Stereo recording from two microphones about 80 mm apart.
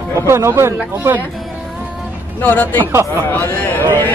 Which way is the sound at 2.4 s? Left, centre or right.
Left.